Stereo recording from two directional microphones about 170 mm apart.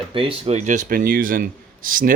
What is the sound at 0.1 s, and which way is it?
Speech, 30° right (ahead or behind).